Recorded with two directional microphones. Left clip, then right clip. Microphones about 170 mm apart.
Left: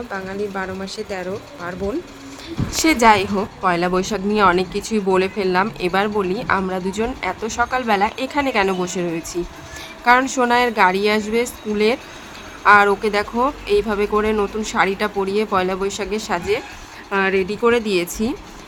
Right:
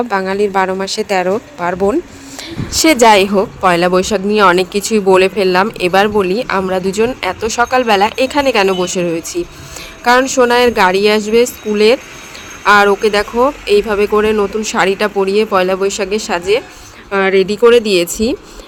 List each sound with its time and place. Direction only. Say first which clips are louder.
0.1 s speech: right 12 dB; 55° right (ahead or behind)
2.7 s speech: right 6 dB; 35° right (ahead or behind)